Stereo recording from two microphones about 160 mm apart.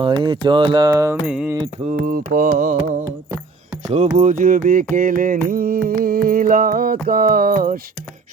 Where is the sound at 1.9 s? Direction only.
65° right (ahead or behind).